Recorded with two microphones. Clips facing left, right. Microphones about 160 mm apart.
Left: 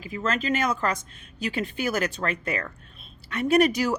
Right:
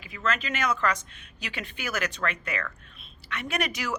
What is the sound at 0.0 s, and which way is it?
A man's voice, 35° left (ahead or behind).